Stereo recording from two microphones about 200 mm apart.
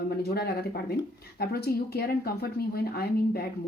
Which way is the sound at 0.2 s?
50° left (ahead or behind).